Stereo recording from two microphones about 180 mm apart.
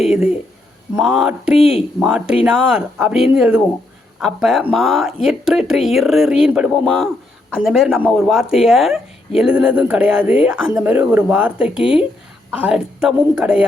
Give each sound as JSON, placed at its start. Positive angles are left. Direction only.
{"t": 0.0, "sound": "speech", "side_deg": -5}